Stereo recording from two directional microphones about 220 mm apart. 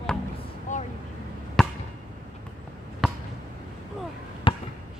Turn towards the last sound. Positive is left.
turn(degrees=25)  # may be behind; listen again after turning